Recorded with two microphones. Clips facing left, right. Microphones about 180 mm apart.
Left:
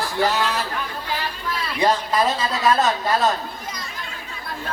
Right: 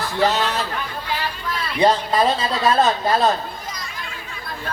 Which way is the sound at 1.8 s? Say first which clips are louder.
Right 3 dB; 25° right (ahead or behind).